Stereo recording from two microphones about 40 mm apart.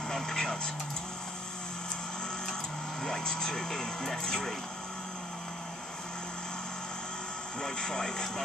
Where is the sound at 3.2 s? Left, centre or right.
Centre.